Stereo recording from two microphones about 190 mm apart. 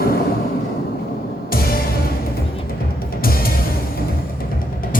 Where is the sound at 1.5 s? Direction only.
50° left (ahead or behind).